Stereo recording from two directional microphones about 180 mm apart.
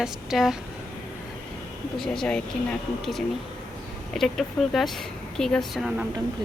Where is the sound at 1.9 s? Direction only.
5° left (ahead or behind).